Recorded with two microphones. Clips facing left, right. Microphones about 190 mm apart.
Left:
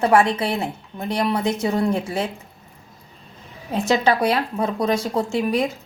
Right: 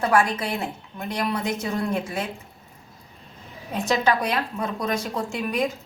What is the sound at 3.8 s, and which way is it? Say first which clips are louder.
A woman's voice: left 4 dB; 30° left (ahead or behind).